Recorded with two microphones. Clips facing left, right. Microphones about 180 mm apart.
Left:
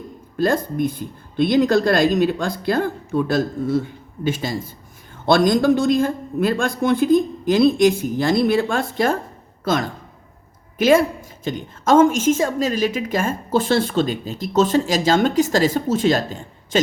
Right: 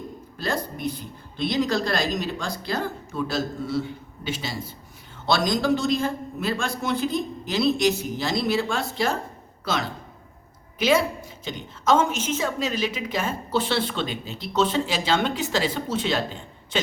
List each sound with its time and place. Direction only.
0.3 s a woman's voice: 50° left (ahead or behind)